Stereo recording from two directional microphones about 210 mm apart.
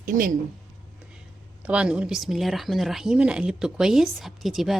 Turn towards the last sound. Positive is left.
turn(degrees=0)  # may be behind; listen again after turning